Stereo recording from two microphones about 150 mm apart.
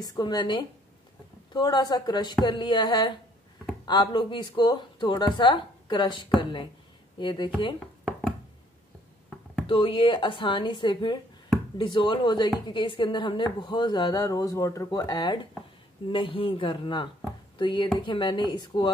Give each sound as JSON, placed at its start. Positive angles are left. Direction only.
{"t": 0.1, "sound": "a woman's voice", "side_deg": 30}
{"t": 9.7, "sound": "a woman's voice", "side_deg": 35}